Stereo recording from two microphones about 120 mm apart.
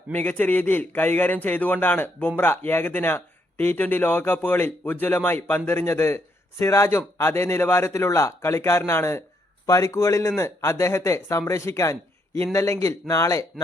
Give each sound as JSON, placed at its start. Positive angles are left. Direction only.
{"t": 0.1, "sound": "a man's voice", "side_deg": 15}